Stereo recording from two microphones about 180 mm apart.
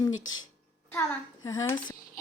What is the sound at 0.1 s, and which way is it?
Speech, 90° left.